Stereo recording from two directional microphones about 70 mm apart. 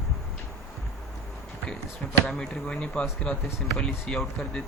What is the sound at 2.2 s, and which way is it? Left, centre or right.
Speech, centre.